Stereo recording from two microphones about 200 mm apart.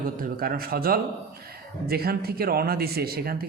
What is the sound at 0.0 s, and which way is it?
Speech, 45° right (ahead or behind).